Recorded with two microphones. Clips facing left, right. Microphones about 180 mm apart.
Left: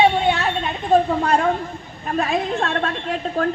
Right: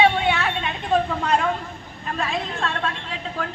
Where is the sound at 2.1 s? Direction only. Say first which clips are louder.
Left 7 dB; 55° left (ahead or behind).